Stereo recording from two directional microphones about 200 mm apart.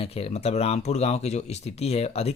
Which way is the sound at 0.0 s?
30° left (ahead or behind).